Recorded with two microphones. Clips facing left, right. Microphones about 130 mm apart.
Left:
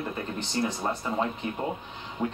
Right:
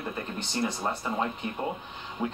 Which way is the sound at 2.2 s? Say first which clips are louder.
Left 1 dB; 5° right (ahead or behind).